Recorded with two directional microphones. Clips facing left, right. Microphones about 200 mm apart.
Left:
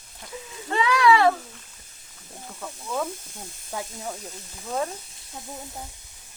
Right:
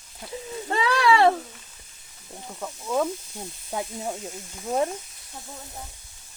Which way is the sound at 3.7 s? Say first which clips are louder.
Right 3 dB; 20° right (ahead or behind).